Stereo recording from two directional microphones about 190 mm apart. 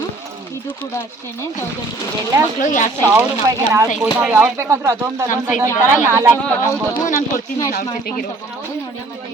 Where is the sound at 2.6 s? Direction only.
40° left (ahead or behind).